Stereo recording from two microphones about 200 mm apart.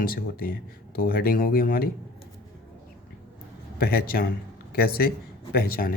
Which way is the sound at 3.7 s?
50° left (ahead or behind).